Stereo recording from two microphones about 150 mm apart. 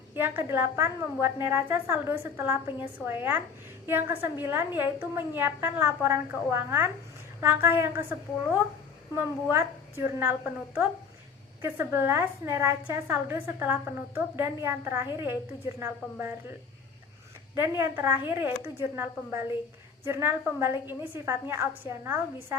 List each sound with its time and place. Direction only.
0.1 s a woman's voice: 15° right (ahead or behind)